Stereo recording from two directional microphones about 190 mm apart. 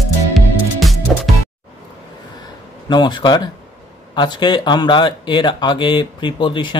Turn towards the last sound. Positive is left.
turn(degrees=25)  # may be behind; listen again after turning